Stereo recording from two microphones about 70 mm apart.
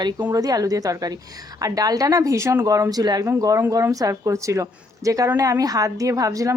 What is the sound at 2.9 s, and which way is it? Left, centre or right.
Speech, right.